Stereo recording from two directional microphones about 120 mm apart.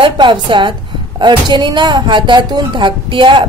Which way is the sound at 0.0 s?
40° right (ahead or behind).